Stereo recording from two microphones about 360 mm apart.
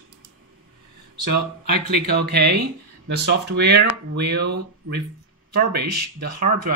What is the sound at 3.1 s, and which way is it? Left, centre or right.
Speech, right.